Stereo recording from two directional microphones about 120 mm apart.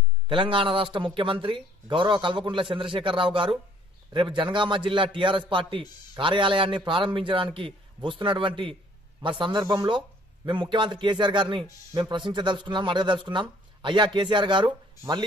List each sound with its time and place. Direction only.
0.3 s a man's voice: 45° right (ahead or behind)